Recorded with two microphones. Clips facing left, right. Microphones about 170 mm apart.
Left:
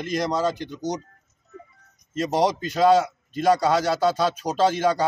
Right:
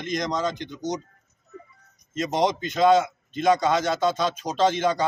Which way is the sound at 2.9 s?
35° left (ahead or behind).